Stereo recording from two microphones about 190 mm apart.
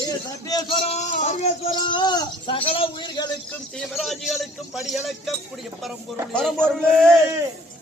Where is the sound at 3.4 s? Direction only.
5° left (ahead or behind).